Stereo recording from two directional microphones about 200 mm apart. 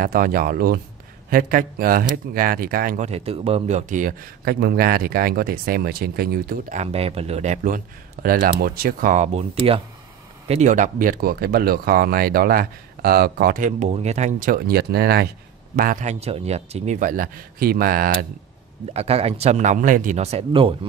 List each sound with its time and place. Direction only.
0.0 s speech: 45° right (ahead or behind)
6.8 s speech: 30° right (ahead or behind); by 18.1 s 45° right (ahead or behind)
18.9 s speech: 30° right (ahead or behind)